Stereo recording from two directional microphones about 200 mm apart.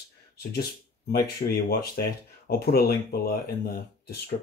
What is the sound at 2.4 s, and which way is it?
Speech, 50° left (ahead or behind).